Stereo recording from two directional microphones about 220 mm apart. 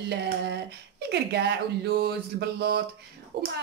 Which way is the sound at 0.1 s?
50° right (ahead or behind).